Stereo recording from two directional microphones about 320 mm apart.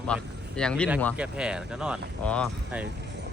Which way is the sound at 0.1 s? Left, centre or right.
Centre.